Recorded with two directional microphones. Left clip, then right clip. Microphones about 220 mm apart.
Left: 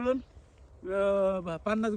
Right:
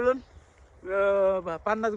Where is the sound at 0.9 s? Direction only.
45° left (ahead or behind).